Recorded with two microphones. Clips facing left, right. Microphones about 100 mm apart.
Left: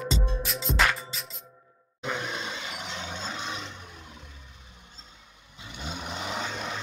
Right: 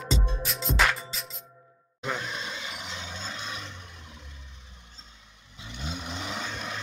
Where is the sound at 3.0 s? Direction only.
20° left (ahead or behind).